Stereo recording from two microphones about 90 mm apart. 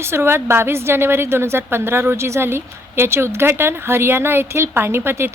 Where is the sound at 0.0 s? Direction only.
30° right (ahead or behind).